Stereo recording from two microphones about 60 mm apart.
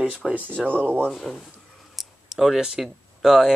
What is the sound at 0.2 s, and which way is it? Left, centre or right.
Speech, centre.